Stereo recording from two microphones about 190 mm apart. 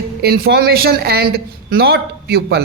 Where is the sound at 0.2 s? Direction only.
55° right (ahead or behind).